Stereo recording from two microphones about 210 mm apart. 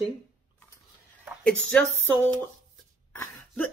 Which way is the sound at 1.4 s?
5° left (ahead or behind).